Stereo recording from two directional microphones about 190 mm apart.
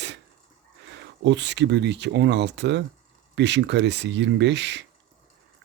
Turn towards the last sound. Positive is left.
turn(degrees=-65)  # may be behind; listen again after turning